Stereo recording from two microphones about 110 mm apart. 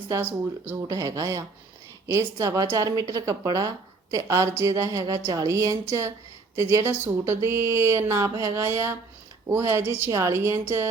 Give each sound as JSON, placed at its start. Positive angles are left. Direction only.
{"t": 0.9, "sound": "a woman's voice", "side_deg": -30}